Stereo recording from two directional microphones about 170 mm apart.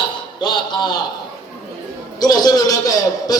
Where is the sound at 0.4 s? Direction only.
25° left (ahead or behind).